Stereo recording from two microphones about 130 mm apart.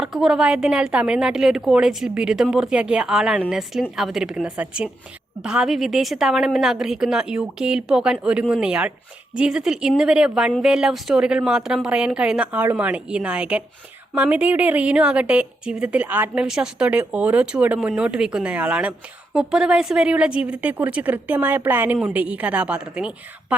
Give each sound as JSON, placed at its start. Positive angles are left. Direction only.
{"t": 0.0, "sound": "a woman's voice", "side_deg": -5}